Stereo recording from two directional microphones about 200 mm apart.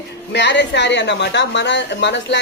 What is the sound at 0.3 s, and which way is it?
A woman's voice, 60° left (ahead or behind).